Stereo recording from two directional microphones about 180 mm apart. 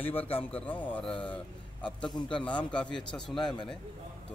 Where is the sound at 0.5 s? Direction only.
10° left (ahead or behind).